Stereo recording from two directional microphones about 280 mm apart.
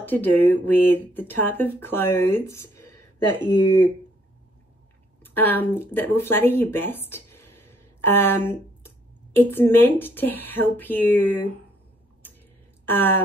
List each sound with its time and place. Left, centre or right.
0.0 s speech: centre
5.2 s speech: centre
12.8 s speech: centre